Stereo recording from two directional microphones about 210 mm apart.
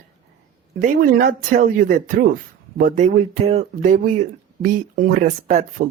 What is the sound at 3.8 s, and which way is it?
Speech, 40° right (ahead or behind).